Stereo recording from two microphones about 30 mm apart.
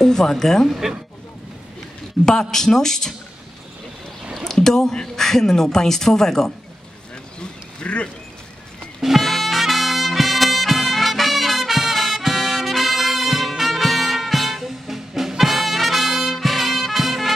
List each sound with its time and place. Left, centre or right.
0.0 s speech: centre
2.2 s speech: centre
4.5 s speech: centre
7.3 s a sound: left
9.0 s music: centre